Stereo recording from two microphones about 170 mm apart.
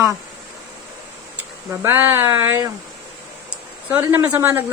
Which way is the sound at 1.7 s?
15° right (ahead or behind).